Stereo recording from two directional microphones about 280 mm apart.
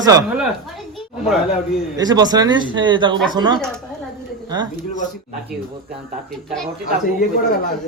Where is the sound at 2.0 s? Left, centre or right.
Centre.